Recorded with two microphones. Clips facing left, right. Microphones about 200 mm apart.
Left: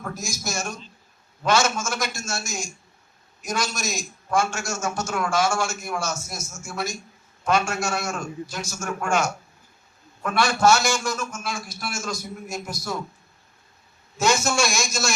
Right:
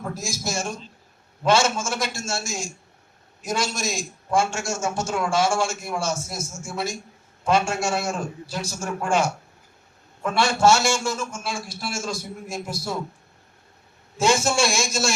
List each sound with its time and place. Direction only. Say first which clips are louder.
0.0 s a man's voice: right 2 dB; 30° right (ahead or behind)
14.2 s a man's voice: right 1 dB; 30° right (ahead or behind)